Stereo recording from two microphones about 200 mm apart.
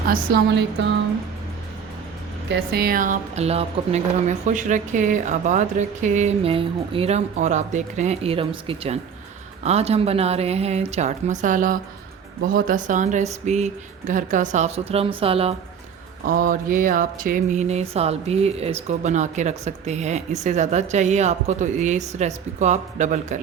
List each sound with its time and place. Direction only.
0.1 s speech: 50° right (ahead or behind)
2.5 s speech: 50° right (ahead or behind); by 15.5 s 30° right (ahead or behind)
16.2 s speech: 45° right (ahead or behind)